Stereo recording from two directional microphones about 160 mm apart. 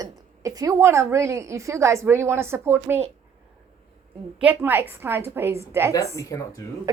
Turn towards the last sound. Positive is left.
turn(degrees=20)  # may be behind; listen again after turning